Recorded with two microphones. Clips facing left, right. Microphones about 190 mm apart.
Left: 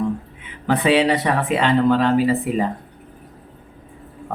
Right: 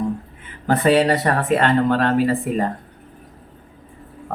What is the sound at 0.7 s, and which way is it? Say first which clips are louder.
Speech: right 1 dB; centre (ahead or behind).